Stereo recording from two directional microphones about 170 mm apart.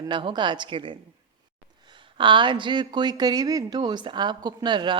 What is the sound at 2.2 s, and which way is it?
A woman's voice, 30° right (ahead or behind).